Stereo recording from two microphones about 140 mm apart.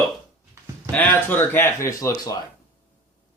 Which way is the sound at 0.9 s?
10° left (ahead or behind).